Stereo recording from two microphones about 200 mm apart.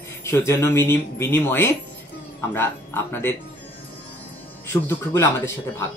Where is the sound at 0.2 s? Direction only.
15° left (ahead or behind).